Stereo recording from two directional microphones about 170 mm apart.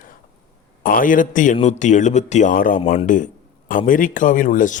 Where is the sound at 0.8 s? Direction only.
55° left (ahead or behind).